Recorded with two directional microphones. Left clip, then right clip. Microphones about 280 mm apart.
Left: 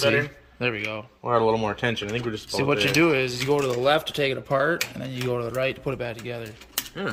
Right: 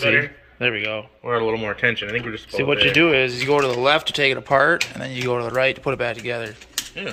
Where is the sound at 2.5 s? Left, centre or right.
Centre.